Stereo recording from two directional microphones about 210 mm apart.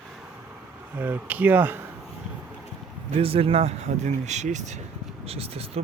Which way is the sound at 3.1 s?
25° right (ahead or behind).